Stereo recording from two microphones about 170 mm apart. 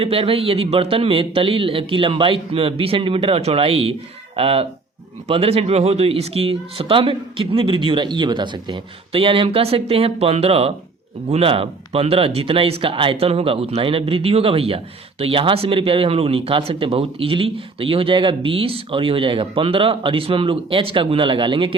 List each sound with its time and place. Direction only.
0.0 s speech: 35° right (ahead or behind)